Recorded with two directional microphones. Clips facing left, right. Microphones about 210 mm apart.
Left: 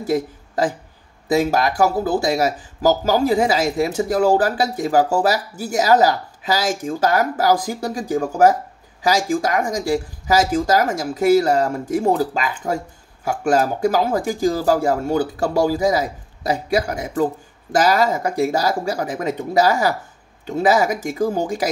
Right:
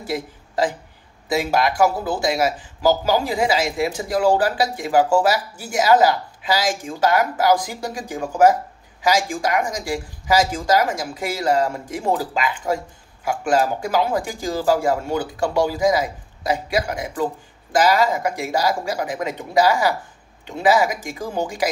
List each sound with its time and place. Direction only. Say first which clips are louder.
1.4 s speech: right 1 dB; 40° left (ahead or behind)